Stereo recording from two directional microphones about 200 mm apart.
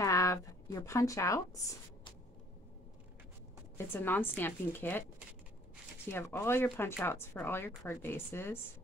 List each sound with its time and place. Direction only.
0.0 s a sound: 15° left (ahead or behind)
3.7 s speech: 10° left (ahead or behind)
6.0 s speech: 10° left (ahead or behind)